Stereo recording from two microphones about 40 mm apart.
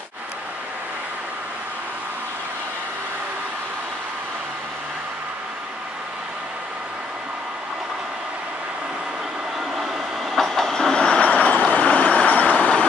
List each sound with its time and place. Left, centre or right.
10.3 s train: centre
11.1 s train: left